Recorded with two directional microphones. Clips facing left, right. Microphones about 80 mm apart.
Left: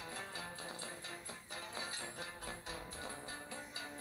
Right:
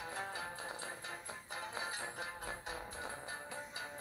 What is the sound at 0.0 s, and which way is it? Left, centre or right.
Music, right.